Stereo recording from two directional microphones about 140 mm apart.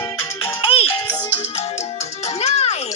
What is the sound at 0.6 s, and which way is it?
Music, 45° left (ahead or behind).